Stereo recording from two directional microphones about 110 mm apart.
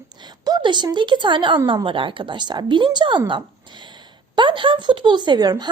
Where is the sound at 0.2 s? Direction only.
40° right (ahead or behind).